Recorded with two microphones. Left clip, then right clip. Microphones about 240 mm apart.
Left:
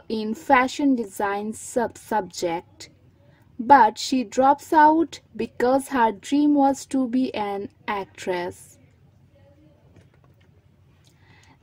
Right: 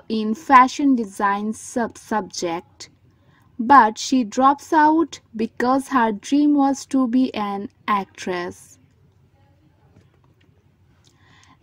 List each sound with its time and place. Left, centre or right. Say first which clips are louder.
0.1 s speech: right 5 dB; centre
3.6 s a woman's voice: right 2 dB; centre